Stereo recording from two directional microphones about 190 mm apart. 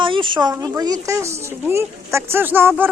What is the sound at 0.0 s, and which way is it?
Speech, 25° right (ahead or behind).